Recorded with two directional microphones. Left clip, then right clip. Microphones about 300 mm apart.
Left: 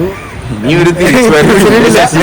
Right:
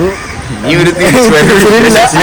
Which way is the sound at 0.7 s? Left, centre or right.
Left.